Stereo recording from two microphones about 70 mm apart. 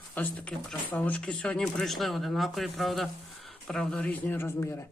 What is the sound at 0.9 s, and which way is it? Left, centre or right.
Mantra, left.